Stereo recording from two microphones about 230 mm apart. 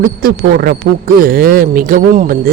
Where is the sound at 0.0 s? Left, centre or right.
Right.